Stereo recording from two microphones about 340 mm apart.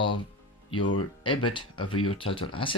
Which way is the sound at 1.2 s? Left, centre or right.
Centre.